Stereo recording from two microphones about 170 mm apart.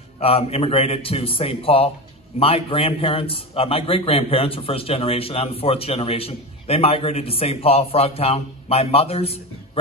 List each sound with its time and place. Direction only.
0.2 s a man's voice: 35° left (ahead or behind)